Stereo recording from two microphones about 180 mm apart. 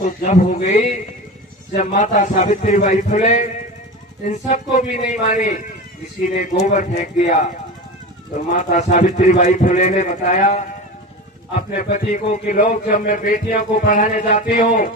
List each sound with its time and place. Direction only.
0.0 s a man's voice: 45° left (ahead or behind)
6.6 s speech: 40° left (ahead or behind)
8.5 s a man's voice: 40° left (ahead or behind)